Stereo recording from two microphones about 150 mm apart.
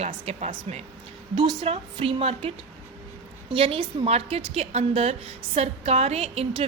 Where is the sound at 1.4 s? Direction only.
35° right (ahead or behind).